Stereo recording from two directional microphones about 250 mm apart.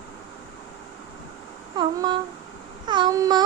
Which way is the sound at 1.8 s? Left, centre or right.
Centre.